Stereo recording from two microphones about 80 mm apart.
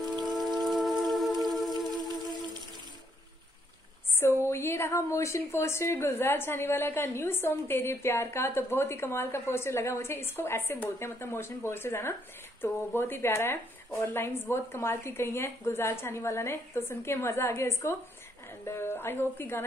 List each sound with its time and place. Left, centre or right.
0.0 s raindrop: right
0.3 s rain: centre
1.4 s music: centre
4.1 s a woman's voice: left